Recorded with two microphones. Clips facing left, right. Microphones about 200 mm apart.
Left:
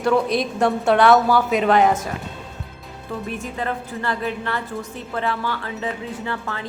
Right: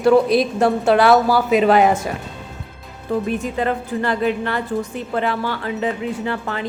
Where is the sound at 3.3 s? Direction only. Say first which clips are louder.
Right 6 dB; 20° right (ahead or behind).